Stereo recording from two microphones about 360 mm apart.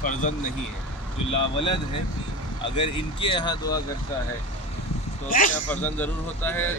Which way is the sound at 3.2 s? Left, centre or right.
Centre.